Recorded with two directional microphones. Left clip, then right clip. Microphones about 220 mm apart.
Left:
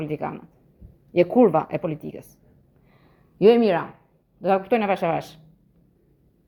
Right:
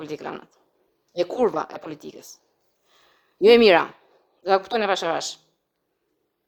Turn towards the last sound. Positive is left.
turn(degrees=-15)  # may be behind; listen again after turning